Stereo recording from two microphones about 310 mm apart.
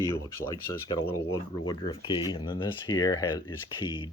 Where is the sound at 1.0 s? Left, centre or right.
Left.